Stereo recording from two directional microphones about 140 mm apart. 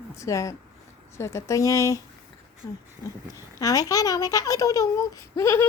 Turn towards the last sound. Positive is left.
turn(degrees=20)  # may be behind; listen again after turning